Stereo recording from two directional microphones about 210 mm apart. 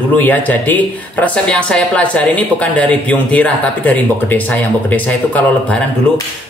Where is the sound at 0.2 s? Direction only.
10° left (ahead or behind).